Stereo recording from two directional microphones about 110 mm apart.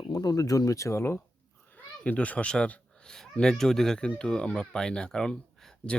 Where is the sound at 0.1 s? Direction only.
35° left (ahead or behind).